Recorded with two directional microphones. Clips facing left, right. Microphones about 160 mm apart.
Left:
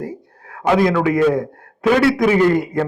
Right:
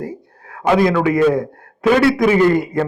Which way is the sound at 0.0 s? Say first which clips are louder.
Right 1 dB; 15° right (ahead or behind).